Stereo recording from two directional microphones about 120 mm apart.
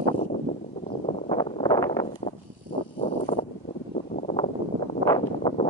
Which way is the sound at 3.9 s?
80° left.